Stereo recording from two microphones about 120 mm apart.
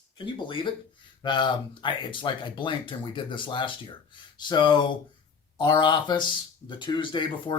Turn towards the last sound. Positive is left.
turn(degrees=40)  # may be behind; listen again after turning